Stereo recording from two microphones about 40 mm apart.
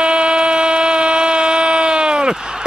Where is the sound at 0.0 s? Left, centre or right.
Right.